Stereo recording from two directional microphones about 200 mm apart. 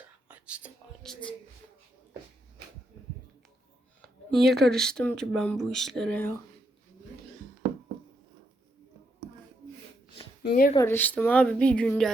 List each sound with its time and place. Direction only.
0.3 s whispering: 5° right (ahead or behind)
4.0 s speech: centre (ahead or behind)
10.4 s speech: 45° left (ahead or behind)
10.8 s a woman's voice: 10° left (ahead or behind)